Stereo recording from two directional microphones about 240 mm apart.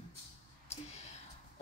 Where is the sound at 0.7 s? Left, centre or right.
Left.